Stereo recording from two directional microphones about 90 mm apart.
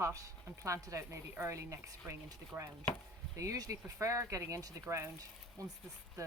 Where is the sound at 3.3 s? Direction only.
40° right (ahead or behind).